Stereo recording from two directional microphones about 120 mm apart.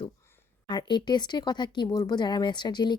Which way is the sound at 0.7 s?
40° left (ahead or behind).